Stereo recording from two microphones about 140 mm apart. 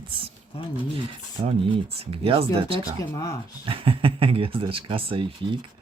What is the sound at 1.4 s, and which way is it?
Speech, 40° right (ahead or behind).